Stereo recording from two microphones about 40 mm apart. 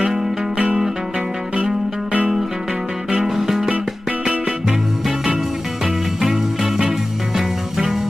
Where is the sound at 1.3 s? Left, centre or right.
Right.